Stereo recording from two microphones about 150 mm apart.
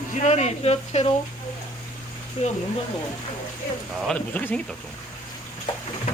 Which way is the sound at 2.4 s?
40° left (ahead or behind).